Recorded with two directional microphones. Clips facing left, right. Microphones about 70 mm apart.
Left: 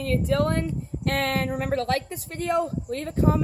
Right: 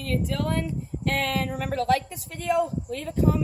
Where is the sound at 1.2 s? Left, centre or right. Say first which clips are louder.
Left 3 dB; left.